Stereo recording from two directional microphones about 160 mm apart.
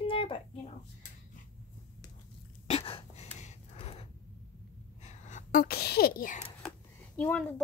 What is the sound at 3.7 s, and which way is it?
Gasp, 40° left (ahead or behind).